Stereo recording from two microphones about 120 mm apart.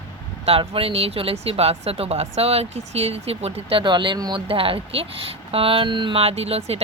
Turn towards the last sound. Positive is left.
turn(degrees=-60)  # may be behind; listen again after turning